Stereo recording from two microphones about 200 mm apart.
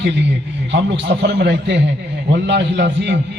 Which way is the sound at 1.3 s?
55° right (ahead or behind).